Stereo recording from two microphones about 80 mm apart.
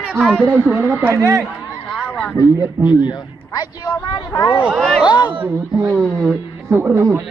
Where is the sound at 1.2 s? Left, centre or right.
Right.